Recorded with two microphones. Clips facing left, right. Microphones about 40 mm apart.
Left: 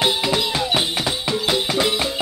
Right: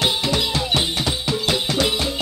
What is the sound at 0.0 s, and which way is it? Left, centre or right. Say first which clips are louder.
Music: left 1 dB; centre.